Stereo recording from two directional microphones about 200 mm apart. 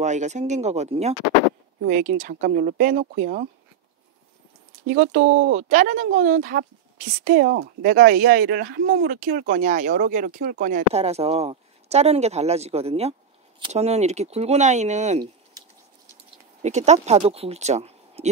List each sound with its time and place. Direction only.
0.0 s speech: 35° right (ahead or behind)
4.9 s speech: 40° right (ahead or behind)
5.2 s speech: 55° right (ahead or behind)
5.5 s speech: 35° right (ahead or behind)
16.6 s speech: 35° right (ahead or behind)